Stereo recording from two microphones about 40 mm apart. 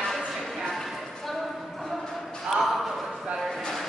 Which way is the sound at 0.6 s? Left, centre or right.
Centre.